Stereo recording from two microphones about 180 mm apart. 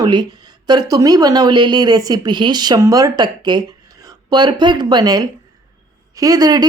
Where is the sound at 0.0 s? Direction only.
25° right (ahead or behind).